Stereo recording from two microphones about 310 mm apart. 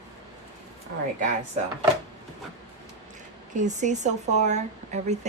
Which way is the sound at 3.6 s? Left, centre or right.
Right.